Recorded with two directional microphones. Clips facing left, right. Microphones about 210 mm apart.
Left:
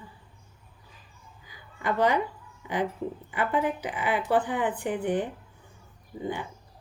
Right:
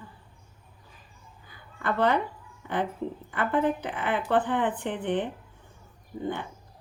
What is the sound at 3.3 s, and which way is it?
Speech, 10° left (ahead or behind).